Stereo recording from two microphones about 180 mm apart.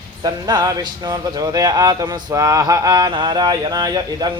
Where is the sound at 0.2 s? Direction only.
20° right (ahead or behind).